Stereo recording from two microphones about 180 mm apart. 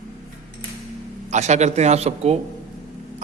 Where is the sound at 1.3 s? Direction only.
40° right (ahead or behind).